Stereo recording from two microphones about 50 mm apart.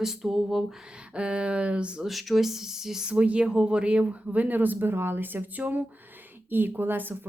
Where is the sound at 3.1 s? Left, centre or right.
Right.